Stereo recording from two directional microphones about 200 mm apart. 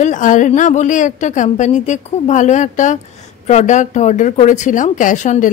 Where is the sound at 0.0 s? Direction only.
40° left (ahead or behind).